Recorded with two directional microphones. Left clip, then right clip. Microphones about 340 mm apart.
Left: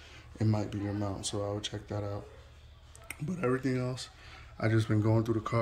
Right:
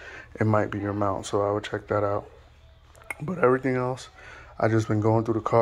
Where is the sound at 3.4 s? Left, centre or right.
Centre.